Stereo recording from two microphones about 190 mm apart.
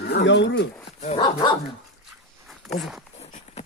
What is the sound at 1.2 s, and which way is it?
Speech, 20° left (ahead or behind).